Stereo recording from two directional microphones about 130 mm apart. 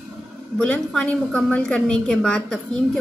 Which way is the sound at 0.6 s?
5° left (ahead or behind).